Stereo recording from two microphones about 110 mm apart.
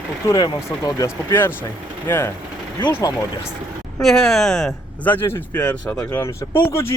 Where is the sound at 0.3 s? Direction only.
40° left (ahead or behind).